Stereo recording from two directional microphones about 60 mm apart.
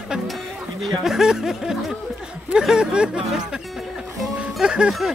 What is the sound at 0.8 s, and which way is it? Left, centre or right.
Speech, centre.